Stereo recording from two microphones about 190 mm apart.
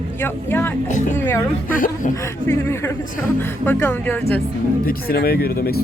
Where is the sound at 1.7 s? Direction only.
45° left (ahead or behind).